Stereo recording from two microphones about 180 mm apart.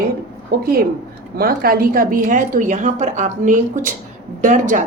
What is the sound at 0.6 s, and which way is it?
A woman's voice, 55° right (ahead or behind).